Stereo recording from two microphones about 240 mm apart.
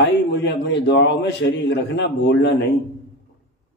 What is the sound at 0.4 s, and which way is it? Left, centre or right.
A man's voice, left.